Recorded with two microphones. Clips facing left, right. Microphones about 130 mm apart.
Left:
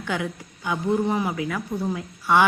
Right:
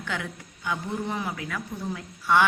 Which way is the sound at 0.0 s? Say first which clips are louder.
Left 5 dB; 15° left (ahead or behind).